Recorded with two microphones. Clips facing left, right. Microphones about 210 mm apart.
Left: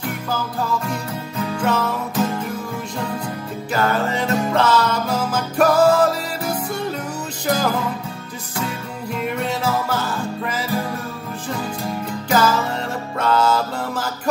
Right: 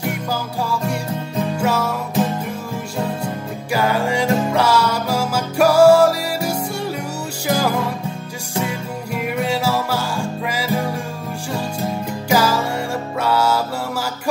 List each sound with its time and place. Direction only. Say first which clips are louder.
0.3 s music: left 3 dB; 10° right (ahead or behind)
3.7 s music: right 2 dB; 10° right (ahead or behind)
9.1 s music: right 2 dB; 10° right (ahead or behind)
12.3 s music: right 1 dB; 10° right (ahead or behind)